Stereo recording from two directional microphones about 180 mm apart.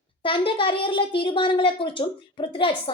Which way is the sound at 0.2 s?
30° left (ahead or behind).